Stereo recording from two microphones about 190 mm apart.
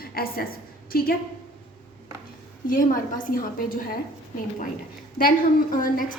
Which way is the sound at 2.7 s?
45° left (ahead or behind).